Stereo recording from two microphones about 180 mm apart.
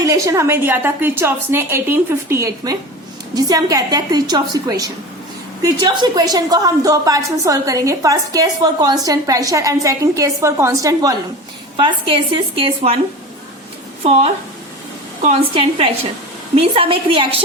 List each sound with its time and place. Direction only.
0.0 s a woman's voice: 15° right (ahead or behind)
11.8 s a woman's voice: 30° right (ahead or behind)
15.2 s a woman's voice: 35° right (ahead or behind)